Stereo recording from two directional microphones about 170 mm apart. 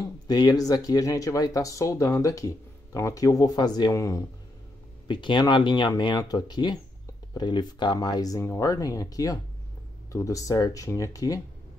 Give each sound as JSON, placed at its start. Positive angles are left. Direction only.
{"t": 0.0, "sound": "speech", "side_deg": 25}